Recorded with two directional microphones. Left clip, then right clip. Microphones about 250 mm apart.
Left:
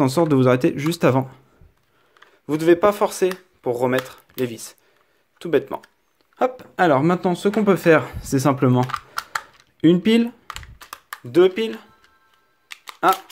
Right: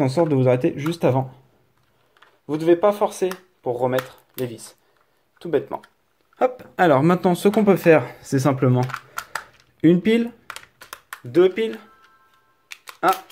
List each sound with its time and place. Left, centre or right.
0.0 s speech: centre
6.3 s speech: centre
12.6 s a sound: centre